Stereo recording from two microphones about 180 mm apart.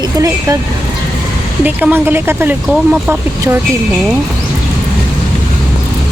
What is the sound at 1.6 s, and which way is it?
Speech, 10° right (ahead or behind).